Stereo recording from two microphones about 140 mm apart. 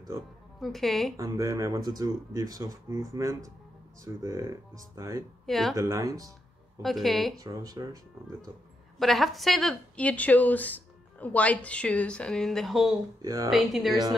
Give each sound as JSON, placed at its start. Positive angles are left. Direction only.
{"t": 0.6, "sound": "a woman's voice", "side_deg": 0}
{"t": 1.1, "sound": "speech", "side_deg": -25}
{"t": 5.5, "sound": "a woman's voice", "side_deg": 0}
{"t": 5.8, "sound": "speech", "side_deg": -25}
{"t": 6.8, "sound": "a woman's voice", "side_deg": 0}
{"t": 7.3, "sound": "speech", "side_deg": -25}
{"t": 9.0, "sound": "a woman's voice", "side_deg": 0}
{"t": 13.2, "sound": "speech", "side_deg": -25}
{"t": 13.5, "sound": "a woman's voice", "side_deg": 0}